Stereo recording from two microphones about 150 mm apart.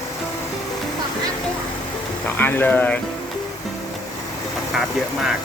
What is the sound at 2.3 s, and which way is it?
Speech, 15° left (ahead or behind).